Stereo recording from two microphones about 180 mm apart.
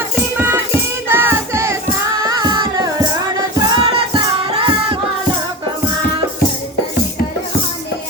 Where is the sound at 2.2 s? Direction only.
25° right (ahead or behind).